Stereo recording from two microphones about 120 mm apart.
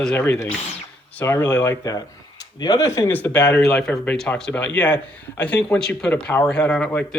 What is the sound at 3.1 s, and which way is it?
Speech, 10° left (ahead or behind).